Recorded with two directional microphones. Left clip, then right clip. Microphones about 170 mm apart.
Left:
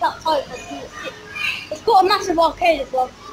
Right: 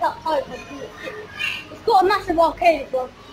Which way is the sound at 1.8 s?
Centre (ahead or behind).